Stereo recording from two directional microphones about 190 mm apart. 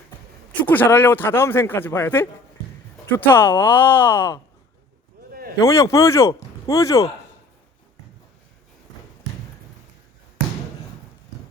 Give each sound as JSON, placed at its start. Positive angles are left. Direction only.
{"t": 0.6, "sound": "a man's voice", "side_deg": 10}
{"t": 5.3, "sound": "a sound", "side_deg": -50}
{"t": 5.5, "sound": "a man's voice", "side_deg": 15}